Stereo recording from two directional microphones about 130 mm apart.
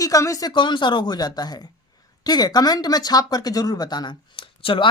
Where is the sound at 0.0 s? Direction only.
25° left (ahead or behind).